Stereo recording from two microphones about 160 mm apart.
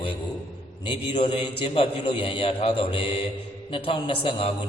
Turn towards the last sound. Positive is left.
turn(degrees=35)  # may be behind; listen again after turning